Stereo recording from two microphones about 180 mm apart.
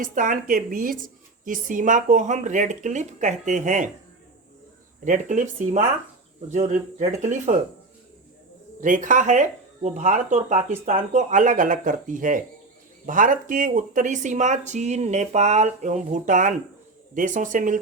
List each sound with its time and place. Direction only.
0.0 s a woman's voice: 45° right (ahead or behind)
5.0 s a woman's voice: 45° right (ahead or behind)
8.8 s a woman's voice: 45° right (ahead or behind)